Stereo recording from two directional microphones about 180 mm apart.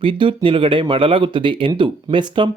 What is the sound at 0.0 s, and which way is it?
Speech, 30° right (ahead or behind).